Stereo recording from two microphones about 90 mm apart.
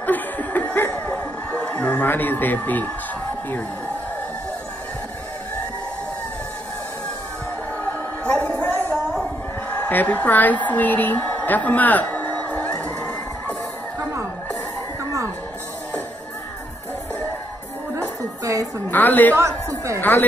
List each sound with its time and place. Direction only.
0.0 s chuckle: 20° left (ahead or behind)
8.3 s a sound: 20° left (ahead or behind)
18.4 s music: 40° right (ahead or behind)
18.9 s a woman's voice: 20° left (ahead or behind)
19.3 s a woman's voice: 35° right (ahead or behind)
20.0 s a woman's voice: 20° left (ahead or behind)